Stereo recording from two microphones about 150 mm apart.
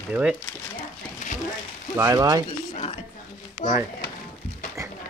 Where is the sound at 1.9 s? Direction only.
20° right (ahead or behind).